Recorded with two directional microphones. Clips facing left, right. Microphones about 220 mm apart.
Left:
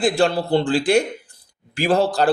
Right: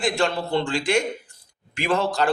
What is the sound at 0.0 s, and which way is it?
Speech, 35° left (ahead or behind).